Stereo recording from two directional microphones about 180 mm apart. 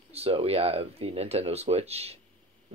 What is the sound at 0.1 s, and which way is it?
Speech, 35° right (ahead or behind).